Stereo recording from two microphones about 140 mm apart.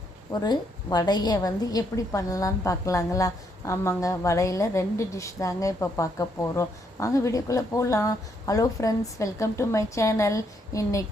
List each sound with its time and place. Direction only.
0.3 s a woman's voice: 30° left (ahead or behind)